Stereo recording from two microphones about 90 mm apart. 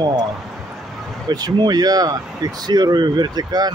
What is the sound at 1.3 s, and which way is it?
Speech, 50° right (ahead or behind).